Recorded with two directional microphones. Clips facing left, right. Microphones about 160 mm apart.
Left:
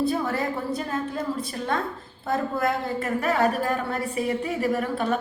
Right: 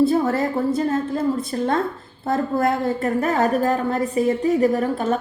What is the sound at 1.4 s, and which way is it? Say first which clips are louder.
A woman's voice: right 6 dB; 50° right (ahead or behind).